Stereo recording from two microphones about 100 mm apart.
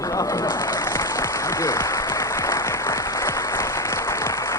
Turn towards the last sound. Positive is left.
turn(degrees=30)  # may be behind; listen again after turning